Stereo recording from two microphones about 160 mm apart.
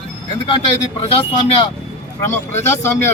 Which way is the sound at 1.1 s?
35° left (ahead or behind).